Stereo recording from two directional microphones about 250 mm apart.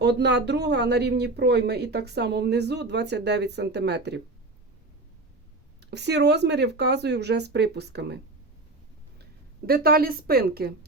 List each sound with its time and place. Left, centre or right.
0.0 s speech: right
5.8 s speech: right
9.6 s speech: right